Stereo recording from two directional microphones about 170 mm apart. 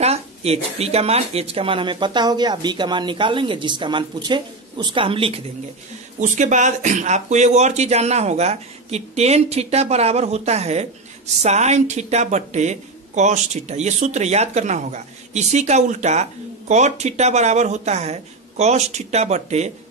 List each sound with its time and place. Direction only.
0.0 s speech: 35° right (ahead or behind)
6.1 s speech: 45° right (ahead or behind)